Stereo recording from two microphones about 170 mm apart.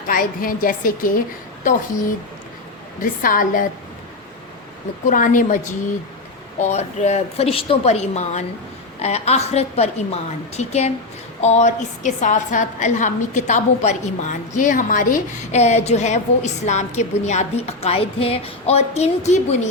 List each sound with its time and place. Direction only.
0.1 s a woman's voice: 55° left (ahead or behind)
3.0 s a woman's voice: 55° left (ahead or behind)
5.0 s a woman's voice: 50° left (ahead or behind)